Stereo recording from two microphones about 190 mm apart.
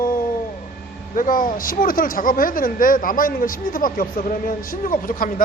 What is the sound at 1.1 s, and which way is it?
Speech, 45° left (ahead or behind).